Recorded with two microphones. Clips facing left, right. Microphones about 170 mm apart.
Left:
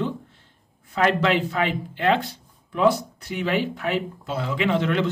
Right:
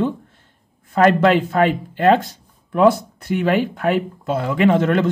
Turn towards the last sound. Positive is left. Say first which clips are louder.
# right 6 dB
turn(degrees=-45)  # may be behind; listen again after turning